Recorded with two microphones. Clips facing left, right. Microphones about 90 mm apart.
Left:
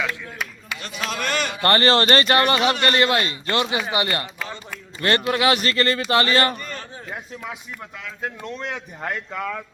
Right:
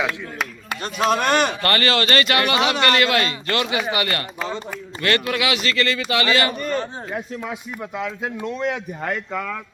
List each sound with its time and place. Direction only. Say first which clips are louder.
0.7 s speech: right 11 dB; 45° right (ahead or behind)
1.6 s speech: left 3 dB; 35° left (ahead or behind)
7.9 s speech: right 5 dB; 15° right (ahead or behind)
9.0 s speech: right 2 dB; 5° left (ahead or behind)